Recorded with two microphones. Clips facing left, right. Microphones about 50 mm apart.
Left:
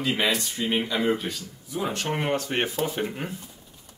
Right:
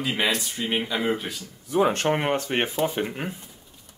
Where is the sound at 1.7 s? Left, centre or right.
Right.